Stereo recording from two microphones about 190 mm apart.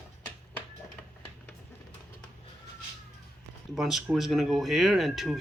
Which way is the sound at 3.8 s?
Centre (ahead or behind).